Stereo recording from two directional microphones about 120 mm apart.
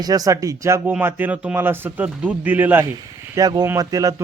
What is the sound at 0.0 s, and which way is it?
Speech, 30° right (ahead or behind).